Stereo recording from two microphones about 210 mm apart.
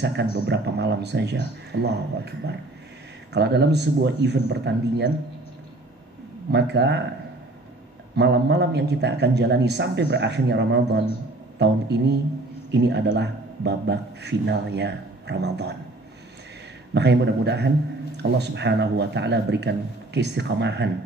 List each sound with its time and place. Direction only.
0.0 s speech: 55° right (ahead or behind)
6.5 s a man's voice: 55° right (ahead or behind)
8.2 s a man's voice: 55° right (ahead or behind)
16.9 s a man's voice: 55° right (ahead or behind)